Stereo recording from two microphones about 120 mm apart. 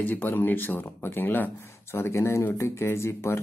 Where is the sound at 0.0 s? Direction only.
15° left (ahead or behind).